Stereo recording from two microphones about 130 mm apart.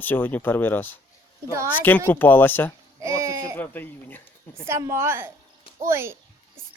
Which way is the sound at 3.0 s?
25° right (ahead or behind).